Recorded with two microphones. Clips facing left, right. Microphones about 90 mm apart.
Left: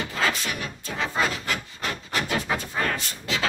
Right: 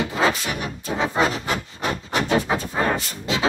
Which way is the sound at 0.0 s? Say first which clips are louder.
Right 5 dB; 20° right (ahead or behind).